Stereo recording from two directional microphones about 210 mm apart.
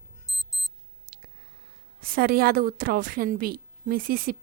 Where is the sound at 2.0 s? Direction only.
45° right (ahead or behind).